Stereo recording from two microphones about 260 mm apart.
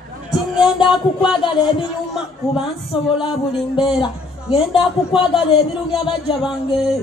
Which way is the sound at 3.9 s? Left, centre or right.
Left.